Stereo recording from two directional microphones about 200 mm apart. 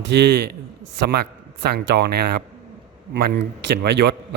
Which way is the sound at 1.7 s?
55° right (ahead or behind).